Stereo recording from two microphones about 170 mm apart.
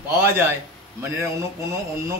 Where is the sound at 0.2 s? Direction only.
15° right (ahead or behind).